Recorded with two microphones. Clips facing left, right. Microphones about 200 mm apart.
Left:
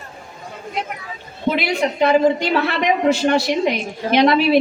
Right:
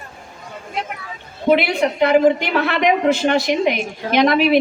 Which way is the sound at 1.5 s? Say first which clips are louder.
Right 2 dB; 60° right (ahead or behind).